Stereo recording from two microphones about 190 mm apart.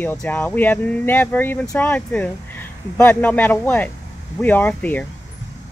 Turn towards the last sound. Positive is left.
turn(degrees=10)  # may be behind; listen again after turning